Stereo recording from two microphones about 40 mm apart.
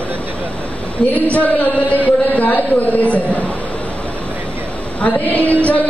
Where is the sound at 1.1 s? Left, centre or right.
Left.